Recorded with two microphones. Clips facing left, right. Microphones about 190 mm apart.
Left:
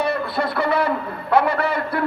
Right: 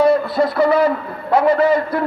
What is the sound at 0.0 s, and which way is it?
A man's voice, 60° left (ahead or behind).